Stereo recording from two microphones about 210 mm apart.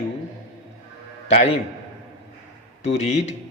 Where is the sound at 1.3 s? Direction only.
30° left (ahead or behind).